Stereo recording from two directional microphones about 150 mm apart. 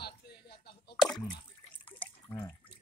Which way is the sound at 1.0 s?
5° left (ahead or behind).